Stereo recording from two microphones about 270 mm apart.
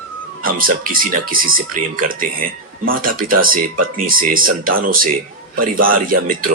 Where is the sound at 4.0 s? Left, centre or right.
Right.